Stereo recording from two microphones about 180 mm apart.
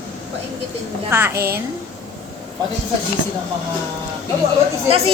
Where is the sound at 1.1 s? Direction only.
15° right (ahead or behind).